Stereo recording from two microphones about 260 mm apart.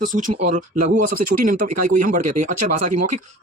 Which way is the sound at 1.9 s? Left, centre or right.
Right.